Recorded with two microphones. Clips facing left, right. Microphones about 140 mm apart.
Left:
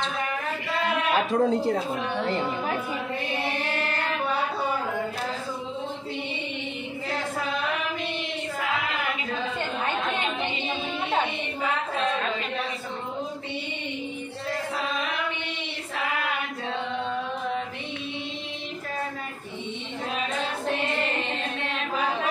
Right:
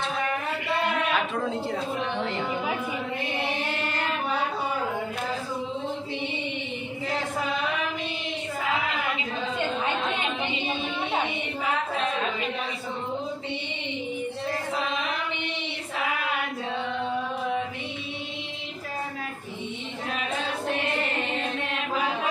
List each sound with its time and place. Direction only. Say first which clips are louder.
1.1 s speech: left 5 dB; 40° left (ahead or behind)